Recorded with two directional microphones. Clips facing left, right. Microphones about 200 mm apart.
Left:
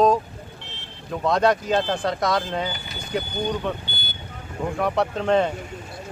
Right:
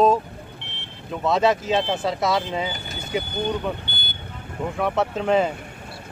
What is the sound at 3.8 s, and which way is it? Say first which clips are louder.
Vehicle: even; 60° right (ahead or behind).